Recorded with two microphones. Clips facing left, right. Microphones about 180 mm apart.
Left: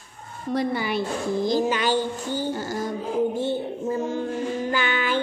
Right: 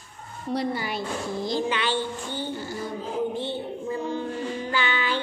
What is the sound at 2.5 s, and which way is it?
Music, 90° left.